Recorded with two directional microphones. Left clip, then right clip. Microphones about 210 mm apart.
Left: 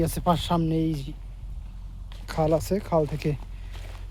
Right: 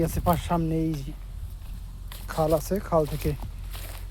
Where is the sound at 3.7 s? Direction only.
55° right (ahead or behind).